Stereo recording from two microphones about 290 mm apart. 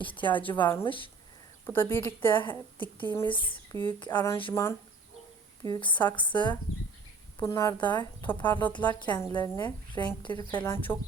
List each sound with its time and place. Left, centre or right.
0.0 s speech: centre
6.0 s speech: centre